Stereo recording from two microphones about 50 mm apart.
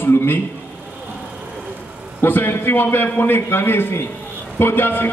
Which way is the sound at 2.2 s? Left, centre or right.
Left.